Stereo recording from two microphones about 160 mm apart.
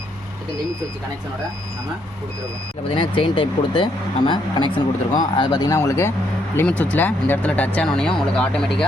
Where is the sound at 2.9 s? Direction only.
30° left (ahead or behind).